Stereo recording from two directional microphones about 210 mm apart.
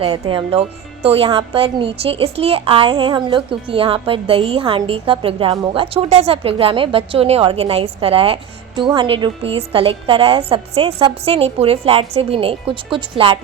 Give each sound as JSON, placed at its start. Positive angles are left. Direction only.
{"t": 0.0, "sound": "a woman's voice", "side_deg": -25}